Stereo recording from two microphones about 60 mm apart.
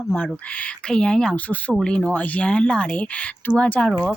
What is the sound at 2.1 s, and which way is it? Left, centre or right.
Speech, left.